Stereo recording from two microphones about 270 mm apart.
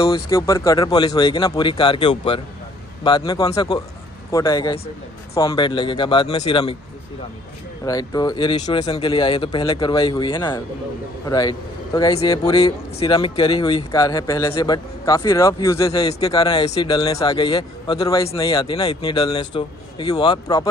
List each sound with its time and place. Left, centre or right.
0.0 s speech: centre
7.8 s speech: centre